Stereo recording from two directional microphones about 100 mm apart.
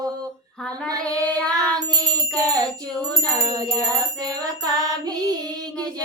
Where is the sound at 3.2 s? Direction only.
35° right (ahead or behind).